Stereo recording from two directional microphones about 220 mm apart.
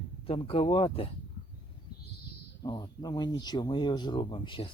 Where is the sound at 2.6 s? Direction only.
20° left (ahead or behind).